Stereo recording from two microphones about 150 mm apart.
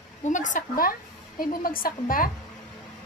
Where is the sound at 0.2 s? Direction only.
55° left (ahead or behind).